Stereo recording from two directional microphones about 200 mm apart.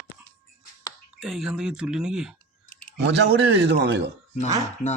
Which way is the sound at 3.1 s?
60° right (ahead or behind).